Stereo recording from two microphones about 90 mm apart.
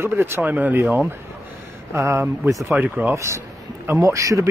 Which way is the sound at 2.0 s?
35° right (ahead or behind).